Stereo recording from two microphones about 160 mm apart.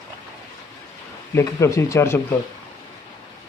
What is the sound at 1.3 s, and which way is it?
Speech, 20° left (ahead or behind).